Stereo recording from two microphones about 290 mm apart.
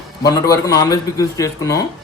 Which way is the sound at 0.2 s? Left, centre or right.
Centre.